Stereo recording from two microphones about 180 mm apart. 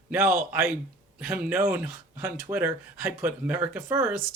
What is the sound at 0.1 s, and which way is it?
Speech, 10° right (ahead or behind).